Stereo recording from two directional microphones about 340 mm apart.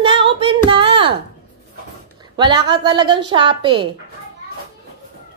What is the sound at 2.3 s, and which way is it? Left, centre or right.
A woman's voice, centre.